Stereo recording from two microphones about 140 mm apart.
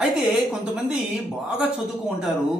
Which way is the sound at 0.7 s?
5° right (ahead or behind).